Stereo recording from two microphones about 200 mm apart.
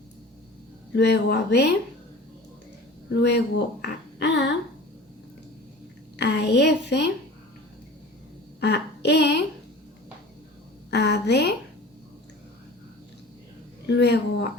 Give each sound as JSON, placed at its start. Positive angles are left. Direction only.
{"t": 0.9, "sound": "speech", "side_deg": 55}
{"t": 3.2, "sound": "speech", "side_deg": 60}
{"t": 6.1, "sound": "a woman's voice", "side_deg": 55}
{"t": 8.6, "sound": "speech", "side_deg": 55}
{"t": 10.9, "sound": "a woman's voice", "side_deg": 55}
{"t": 13.8, "sound": "a sound", "side_deg": 55}